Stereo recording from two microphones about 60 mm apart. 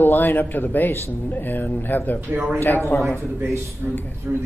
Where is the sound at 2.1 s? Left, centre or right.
Right.